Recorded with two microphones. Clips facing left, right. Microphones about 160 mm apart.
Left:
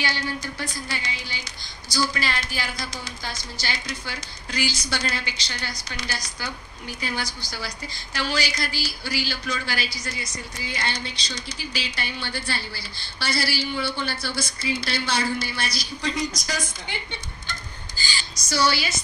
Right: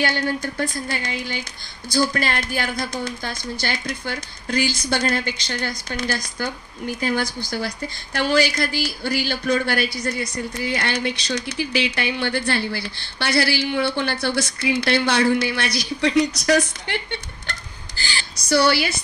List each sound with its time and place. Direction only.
0.0 s a woman's voice: 55° right (ahead or behind)